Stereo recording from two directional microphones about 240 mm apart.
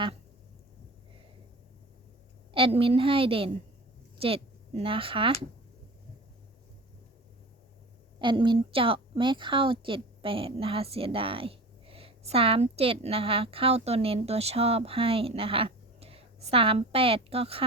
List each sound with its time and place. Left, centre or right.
2.5 s a woman's voice: right
8.2 s a woman's voice: centre